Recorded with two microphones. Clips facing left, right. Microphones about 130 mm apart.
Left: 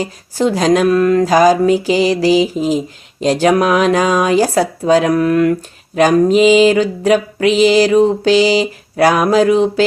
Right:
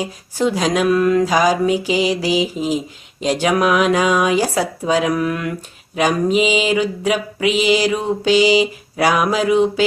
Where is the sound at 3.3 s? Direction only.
35° left (ahead or behind).